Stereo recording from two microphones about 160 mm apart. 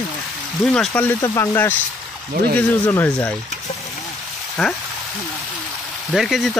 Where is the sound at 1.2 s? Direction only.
20° left (ahead or behind).